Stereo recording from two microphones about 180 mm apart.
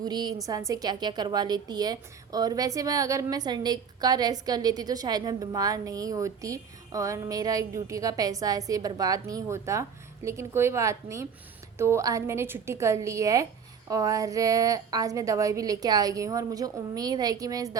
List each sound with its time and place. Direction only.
0.0 s a woman's voice: 20° right (ahead or behind)